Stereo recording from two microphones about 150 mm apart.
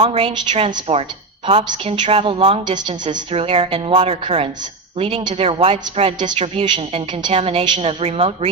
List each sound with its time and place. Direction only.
0.1 s a woman's voice: 45° right (ahead or behind)